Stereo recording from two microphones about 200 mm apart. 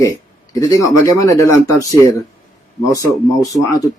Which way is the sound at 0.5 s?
15° left (ahead or behind).